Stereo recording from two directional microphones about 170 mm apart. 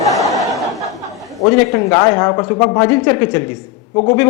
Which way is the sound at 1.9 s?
20° left (ahead or behind).